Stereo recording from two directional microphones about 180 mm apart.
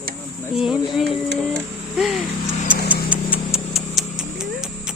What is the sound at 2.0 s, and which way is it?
Vehicle, centre (ahead or behind).